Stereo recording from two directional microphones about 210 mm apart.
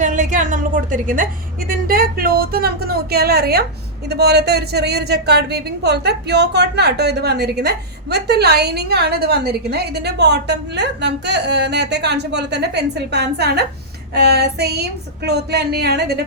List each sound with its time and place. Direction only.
0.0 s a woman's voice: 35° right (ahead or behind)